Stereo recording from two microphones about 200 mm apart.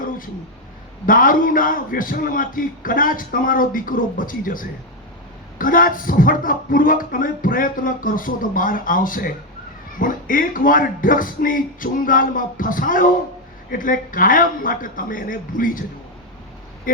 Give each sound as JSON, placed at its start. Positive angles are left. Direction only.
{"t": 1.0, "sound": "speech", "side_deg": 45}